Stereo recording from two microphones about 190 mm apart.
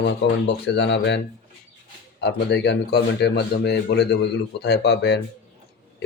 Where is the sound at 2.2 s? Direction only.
60° left (ahead or behind).